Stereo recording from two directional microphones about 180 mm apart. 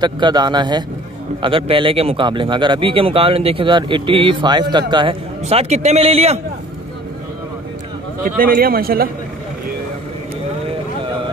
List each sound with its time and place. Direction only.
0.0 s a man's voice: 25° right (ahead or behind)
8.4 s speech: 55° right (ahead or behind)